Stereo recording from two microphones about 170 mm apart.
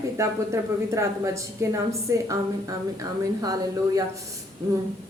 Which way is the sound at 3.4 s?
20° right (ahead or behind).